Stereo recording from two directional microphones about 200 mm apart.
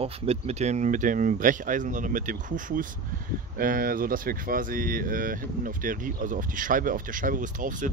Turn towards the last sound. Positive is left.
turn(degrees=-40)  # may be behind; listen again after turning